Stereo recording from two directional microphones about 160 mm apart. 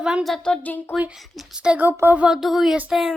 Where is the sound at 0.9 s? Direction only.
5° right (ahead or behind).